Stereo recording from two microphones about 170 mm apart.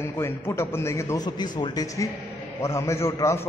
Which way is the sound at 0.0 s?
15° left (ahead or behind).